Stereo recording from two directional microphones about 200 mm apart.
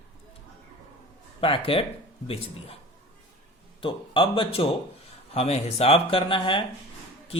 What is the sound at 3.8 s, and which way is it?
A man's voice, 25° left (ahead or behind).